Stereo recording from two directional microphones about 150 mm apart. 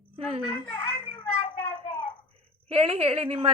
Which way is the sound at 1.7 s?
45° left (ahead or behind).